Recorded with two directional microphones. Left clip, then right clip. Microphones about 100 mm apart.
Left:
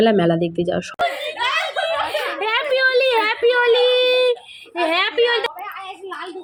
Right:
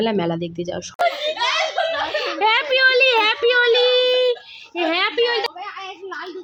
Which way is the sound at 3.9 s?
85° right.